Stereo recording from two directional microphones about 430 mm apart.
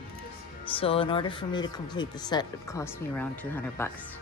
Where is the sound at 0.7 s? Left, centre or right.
Centre.